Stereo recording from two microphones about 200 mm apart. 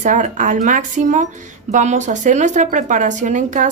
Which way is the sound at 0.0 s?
40° right (ahead or behind).